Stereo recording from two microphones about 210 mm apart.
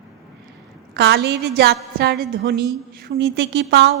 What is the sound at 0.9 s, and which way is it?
A woman's voice, 50° right (ahead or behind).